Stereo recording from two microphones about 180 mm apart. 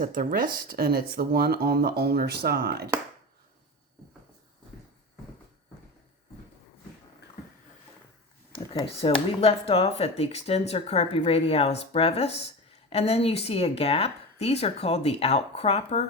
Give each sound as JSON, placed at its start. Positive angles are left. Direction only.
{"t": 0.0, "sound": "speech", "side_deg": -50}
{"t": 8.5, "sound": "speech", "side_deg": 30}